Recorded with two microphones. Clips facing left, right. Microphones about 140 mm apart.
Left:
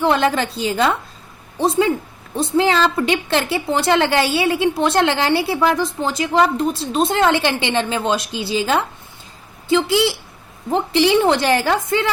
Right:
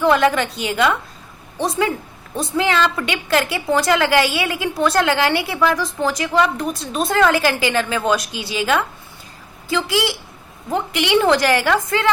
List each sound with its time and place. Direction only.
0.0 s a woman's voice: 30° left (ahead or behind)